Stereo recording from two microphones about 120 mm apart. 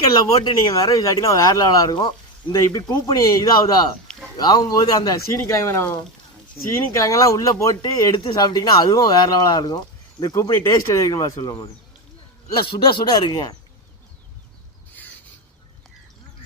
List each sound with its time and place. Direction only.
0.4 s speech: 30° left (ahead or behind)
4.1 s a sound: 5° left (ahead or behind)
4.4 s speech: 30° left (ahead or behind)
12.6 s speech: 35° left (ahead or behind)